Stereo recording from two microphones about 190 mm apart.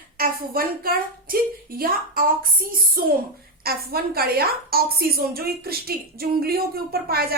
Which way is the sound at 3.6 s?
55° right (ahead or behind).